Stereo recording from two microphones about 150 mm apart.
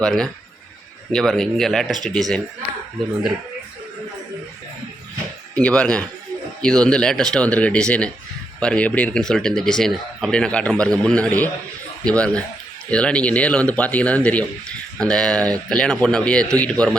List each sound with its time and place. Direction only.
0.0 s speech: 5° left (ahead or behind)
5.5 s speech: 10° left (ahead or behind)